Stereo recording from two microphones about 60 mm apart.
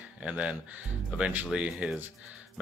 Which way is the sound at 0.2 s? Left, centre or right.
Centre.